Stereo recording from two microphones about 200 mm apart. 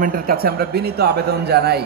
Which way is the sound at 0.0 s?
45° right (ahead or behind).